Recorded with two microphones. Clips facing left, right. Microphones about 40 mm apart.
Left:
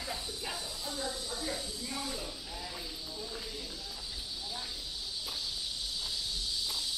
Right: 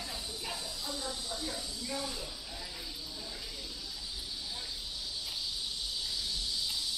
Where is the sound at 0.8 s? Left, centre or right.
Left.